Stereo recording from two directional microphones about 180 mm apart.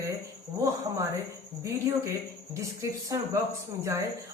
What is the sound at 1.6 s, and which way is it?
Speech, 15° right (ahead or behind).